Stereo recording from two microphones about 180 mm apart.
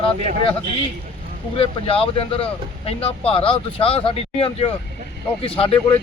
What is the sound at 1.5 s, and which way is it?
Speech, 30° left (ahead or behind).